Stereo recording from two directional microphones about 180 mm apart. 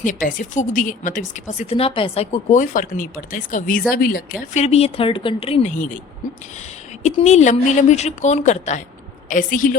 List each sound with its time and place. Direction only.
0.0 s speech: 45° left (ahead or behind); by 5.7 s 30° left (ahead or behind)
5.7 s speech: 45° left (ahead or behind)
7.0 s a woman's voice: 40° left (ahead or behind)